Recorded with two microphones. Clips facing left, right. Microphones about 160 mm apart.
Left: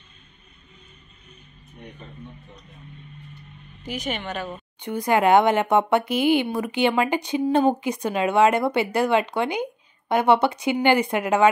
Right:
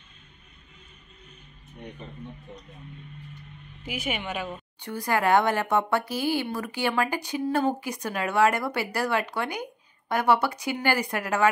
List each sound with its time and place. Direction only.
3.8 s speech: 5° right (ahead or behind)
4.5 s speech: 20° left (ahead or behind)